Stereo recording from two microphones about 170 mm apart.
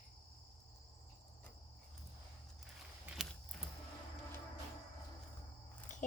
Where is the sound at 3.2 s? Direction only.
5° right (ahead or behind).